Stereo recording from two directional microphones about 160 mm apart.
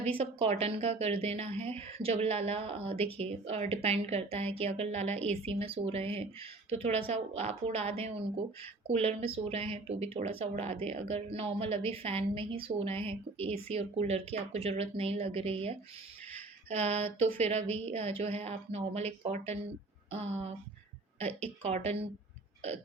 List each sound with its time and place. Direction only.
0.0 s a woman's voice: 35° right (ahead or behind)
21.2 s a woman's voice: 10° left (ahead or behind)
21.6 s a woman's voice: 40° right (ahead or behind)